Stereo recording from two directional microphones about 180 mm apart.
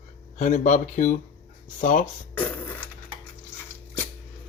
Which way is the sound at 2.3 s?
10° left (ahead or behind).